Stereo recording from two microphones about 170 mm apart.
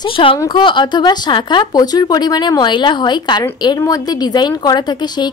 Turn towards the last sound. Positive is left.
turn(degrees=25)  # may be behind; listen again after turning